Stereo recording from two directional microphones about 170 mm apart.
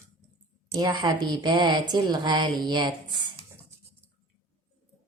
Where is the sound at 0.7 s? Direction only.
25° right (ahead or behind).